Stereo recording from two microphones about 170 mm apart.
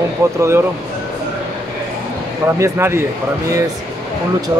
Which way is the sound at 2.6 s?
15° right (ahead or behind).